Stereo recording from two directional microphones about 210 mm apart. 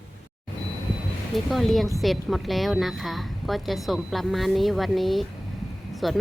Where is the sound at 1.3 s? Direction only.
Centre (ahead or behind).